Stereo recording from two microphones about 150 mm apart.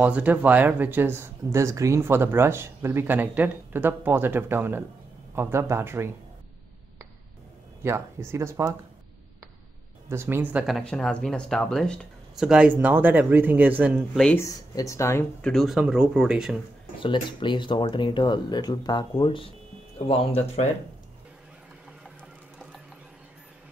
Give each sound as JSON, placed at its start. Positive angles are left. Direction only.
{"t": 0.0, "sound": "speech", "side_deg": -10}
{"t": 7.8, "sound": "speech", "side_deg": -15}
{"t": 10.0, "sound": "speech", "side_deg": -15}
{"t": 10.7, "sound": "speech", "side_deg": 5}
{"t": 14.1, "sound": "speech", "side_deg": 5}
{"t": 14.4, "sound": "speech", "side_deg": 20}
{"t": 15.4, "sound": "speech", "side_deg": 0}
{"t": 17.0, "sound": "speech", "side_deg": 30}